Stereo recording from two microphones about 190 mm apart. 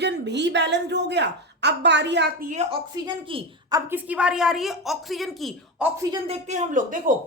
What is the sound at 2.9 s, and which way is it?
A woman's voice, 25° right (ahead or behind).